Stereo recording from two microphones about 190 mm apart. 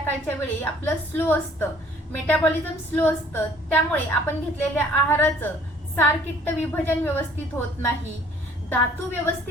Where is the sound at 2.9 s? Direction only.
10° left (ahead or behind).